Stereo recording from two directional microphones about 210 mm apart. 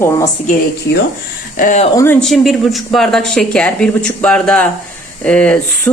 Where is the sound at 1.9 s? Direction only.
10° left (ahead or behind).